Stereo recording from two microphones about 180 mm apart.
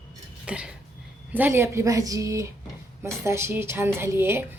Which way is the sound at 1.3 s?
10° right (ahead or behind).